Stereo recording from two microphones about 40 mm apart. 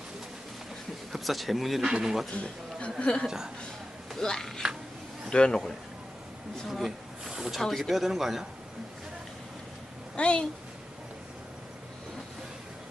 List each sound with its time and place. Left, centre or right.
1.1 s speech: centre
1.8 s a man's voice: centre
3.0 s a woman's voice: left
3.2 s a man's voice: centre
4.2 s speech: centre
5.3 s a woman's voice: left
6.7 s speech: centre
7.3 s speech: centre
7.6 s speech: centre
7.9 s a man's voice: centre
10.2 s a woman's voice: left